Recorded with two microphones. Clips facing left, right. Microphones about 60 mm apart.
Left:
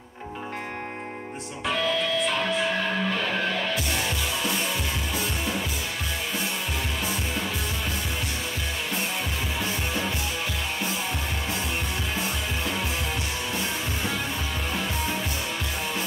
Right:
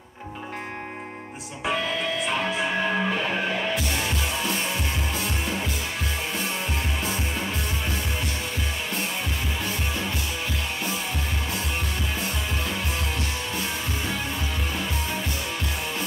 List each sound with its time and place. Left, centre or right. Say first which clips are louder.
2.8 s music: right 2 dB; centre